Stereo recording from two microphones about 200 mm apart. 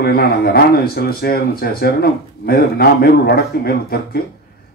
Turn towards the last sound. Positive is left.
turn(degrees=50)  # may be behind; listen again after turning